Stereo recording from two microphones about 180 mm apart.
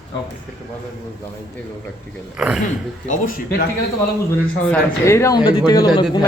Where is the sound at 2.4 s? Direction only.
5° right (ahead or behind).